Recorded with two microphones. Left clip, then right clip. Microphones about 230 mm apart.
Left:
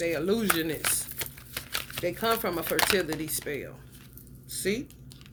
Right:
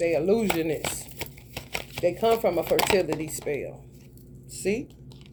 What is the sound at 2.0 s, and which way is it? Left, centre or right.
Speech, centre.